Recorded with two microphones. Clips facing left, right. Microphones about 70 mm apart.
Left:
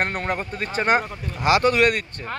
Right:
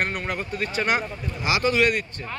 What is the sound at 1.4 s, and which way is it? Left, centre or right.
Speech, left.